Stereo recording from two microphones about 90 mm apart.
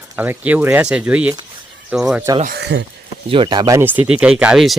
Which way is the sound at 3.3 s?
75° right (ahead or behind).